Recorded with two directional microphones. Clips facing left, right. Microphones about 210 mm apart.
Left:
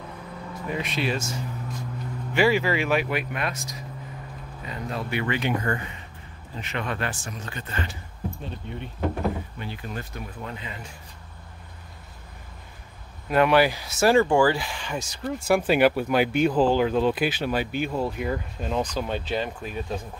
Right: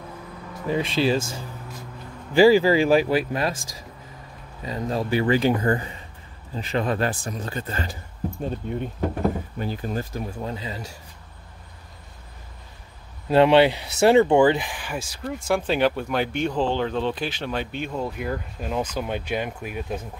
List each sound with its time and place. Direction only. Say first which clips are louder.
0.7 s speech: right 6 dB; 30° right (ahead or behind)
4.6 s speech: right 6 dB; 40° right (ahead or behind)
13.3 s speech: right 4 dB; 25° right (ahead or behind)
15.0 s speech: left 1 dB; centre (ahead or behind)